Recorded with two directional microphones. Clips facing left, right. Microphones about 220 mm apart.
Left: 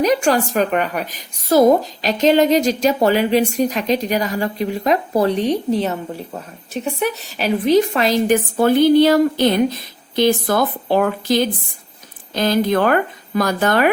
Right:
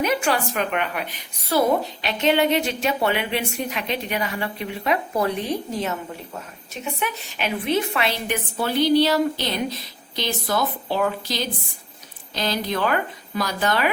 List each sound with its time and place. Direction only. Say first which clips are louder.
0.0 s a woman's voice: left 6 dB; 40° left (ahead or behind)